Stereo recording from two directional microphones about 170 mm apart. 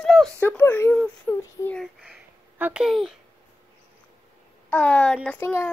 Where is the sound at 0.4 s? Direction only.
10° left (ahead or behind).